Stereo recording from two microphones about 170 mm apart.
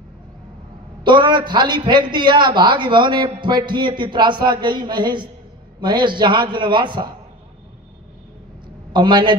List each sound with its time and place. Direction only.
1.0 s a man's voice: 25° right (ahead or behind)
8.9 s a man's voice: 25° right (ahead or behind)